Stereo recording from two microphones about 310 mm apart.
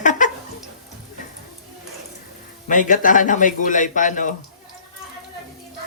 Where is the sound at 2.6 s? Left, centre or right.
Left.